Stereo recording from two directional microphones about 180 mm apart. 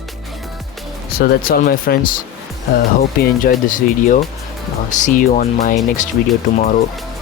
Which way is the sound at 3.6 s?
45° left (ahead or behind).